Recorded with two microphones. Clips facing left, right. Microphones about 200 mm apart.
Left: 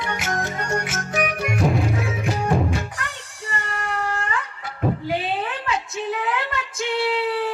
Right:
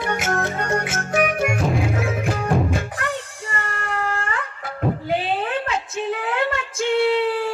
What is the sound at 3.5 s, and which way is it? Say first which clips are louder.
Music: left 1 dB; 50° right (ahead or behind).